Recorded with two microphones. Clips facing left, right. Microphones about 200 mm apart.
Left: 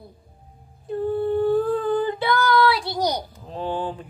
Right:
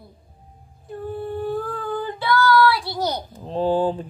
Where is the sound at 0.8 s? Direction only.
25° left (ahead or behind).